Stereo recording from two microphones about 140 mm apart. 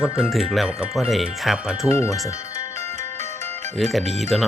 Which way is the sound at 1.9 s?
20° left (ahead or behind).